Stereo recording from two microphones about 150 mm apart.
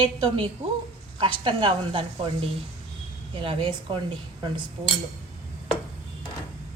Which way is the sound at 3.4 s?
35° right (ahead or behind).